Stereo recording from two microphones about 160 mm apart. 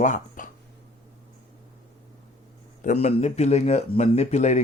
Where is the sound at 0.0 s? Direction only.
50° left (ahead or behind).